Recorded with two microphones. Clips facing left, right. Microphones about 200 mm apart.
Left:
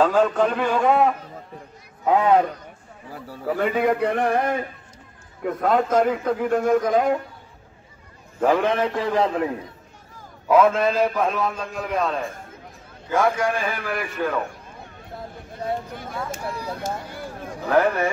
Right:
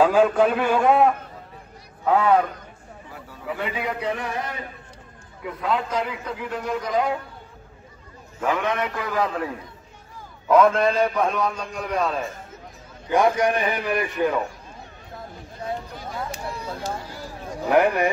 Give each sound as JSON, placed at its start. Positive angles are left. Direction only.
{"t": 0.0, "sound": "a man's voice", "side_deg": -10}
{"t": 2.0, "sound": "a man's voice", "side_deg": 20}
{"t": 3.1, "sound": "a man's voice", "side_deg": 40}
{"t": 8.4, "sound": "a man's voice", "side_deg": 35}
{"t": 10.5, "sound": "a man's voice", "side_deg": 5}
{"t": 13.1, "sound": "a man's voice", "side_deg": -20}
{"t": 16.8, "sound": "speech", "side_deg": 55}
{"t": 17.6, "sound": "a man's voice", "side_deg": -15}